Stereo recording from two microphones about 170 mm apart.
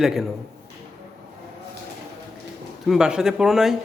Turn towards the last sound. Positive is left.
turn(degrees=0)  # may be behind; listen again after turning